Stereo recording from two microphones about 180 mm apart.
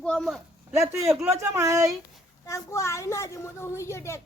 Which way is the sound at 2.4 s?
15° left (ahead or behind).